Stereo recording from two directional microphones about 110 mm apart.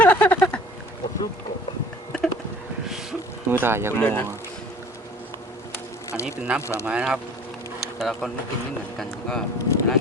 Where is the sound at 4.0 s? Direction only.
15° left (ahead or behind).